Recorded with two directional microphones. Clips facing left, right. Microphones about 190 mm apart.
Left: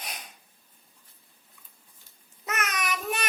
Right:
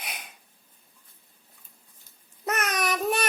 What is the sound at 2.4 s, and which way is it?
Child singing, 35° right (ahead or behind).